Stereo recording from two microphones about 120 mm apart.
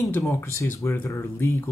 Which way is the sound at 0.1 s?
20° left (ahead or behind).